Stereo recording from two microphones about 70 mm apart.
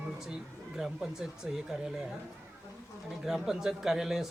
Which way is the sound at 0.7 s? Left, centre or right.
Centre.